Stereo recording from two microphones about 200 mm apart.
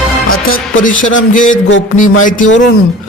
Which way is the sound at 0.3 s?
45° left (ahead or behind).